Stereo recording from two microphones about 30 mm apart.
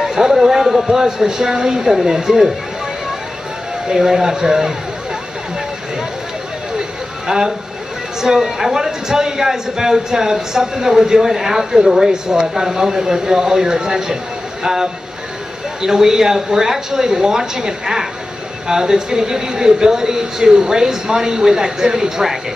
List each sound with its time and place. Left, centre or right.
0.2 s speech: centre
3.9 s speech: centre
7.2 s speech: centre